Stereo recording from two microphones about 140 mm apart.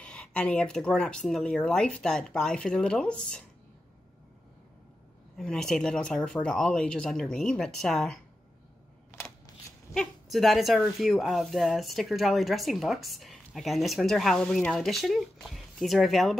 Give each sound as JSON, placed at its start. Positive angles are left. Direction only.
{"t": 0.0, "sound": "speech", "side_deg": 5}
{"t": 5.4, "sound": "speech", "side_deg": 5}
{"t": 9.1, "sound": "a sound", "side_deg": 20}
{"t": 9.9, "sound": "speech", "side_deg": 0}